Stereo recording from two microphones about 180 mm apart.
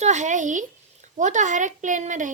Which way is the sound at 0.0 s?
40° right (ahead or behind).